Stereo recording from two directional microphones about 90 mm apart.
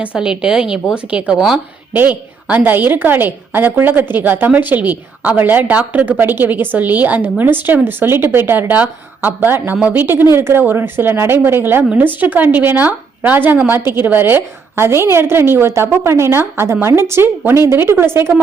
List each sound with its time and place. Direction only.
0.0 s a woman's voice: 10° right (ahead or behind)
1.9 s a woman's voice: 20° right (ahead or behind)